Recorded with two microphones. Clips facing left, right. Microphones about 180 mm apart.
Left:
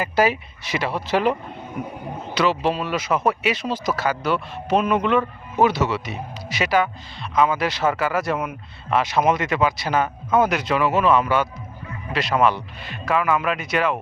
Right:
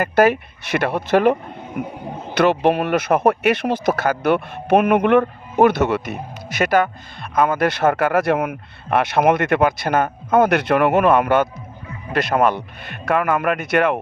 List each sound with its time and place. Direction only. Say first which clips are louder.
0.0 s speech: right 5 dB; 55° right (ahead or behind)